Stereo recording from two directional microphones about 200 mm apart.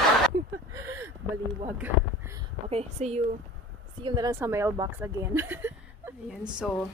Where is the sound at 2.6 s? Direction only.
30° right (ahead or behind).